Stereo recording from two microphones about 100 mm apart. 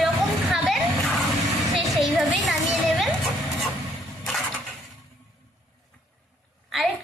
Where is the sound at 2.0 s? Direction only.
Centre (ahead or behind).